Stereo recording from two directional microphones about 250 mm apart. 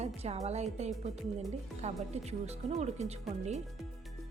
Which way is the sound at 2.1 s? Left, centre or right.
Right.